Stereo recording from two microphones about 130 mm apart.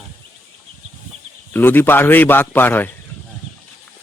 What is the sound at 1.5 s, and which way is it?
A man's voice, 15° left (ahead or behind).